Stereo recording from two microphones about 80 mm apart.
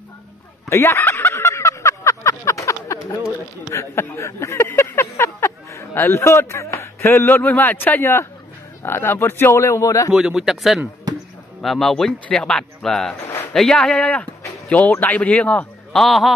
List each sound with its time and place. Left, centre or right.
0.7 s a sound: left
3.7 s speech: left
10.1 s speech: centre
11.1 s basketball bounce: right
11.6 s speech: centre
15.9 s speech: centre